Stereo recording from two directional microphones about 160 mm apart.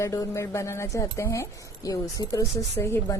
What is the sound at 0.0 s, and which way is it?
Speech, 20° left (ahead or behind).